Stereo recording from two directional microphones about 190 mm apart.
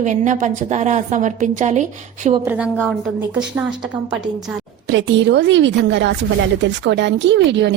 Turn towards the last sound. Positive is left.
turn(degrees=-70)  # may be behind; listen again after turning